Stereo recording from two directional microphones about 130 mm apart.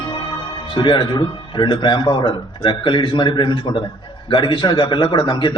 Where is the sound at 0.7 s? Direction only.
35° left (ahead or behind).